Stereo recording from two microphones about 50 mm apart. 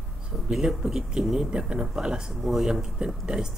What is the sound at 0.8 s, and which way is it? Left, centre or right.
Speech, right.